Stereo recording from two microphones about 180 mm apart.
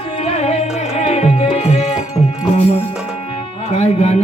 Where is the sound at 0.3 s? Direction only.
35° left (ahead or behind).